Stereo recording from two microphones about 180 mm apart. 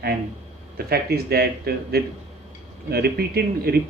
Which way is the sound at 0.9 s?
60° right (ahead or behind).